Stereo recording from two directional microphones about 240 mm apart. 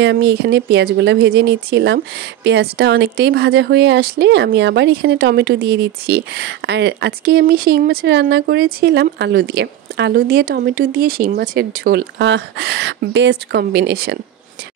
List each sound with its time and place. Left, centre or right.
0.0 s speech: right